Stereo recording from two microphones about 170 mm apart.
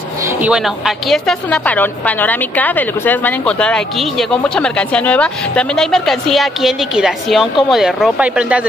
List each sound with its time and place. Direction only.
0.4 s a woman's voice: 5° right (ahead or behind)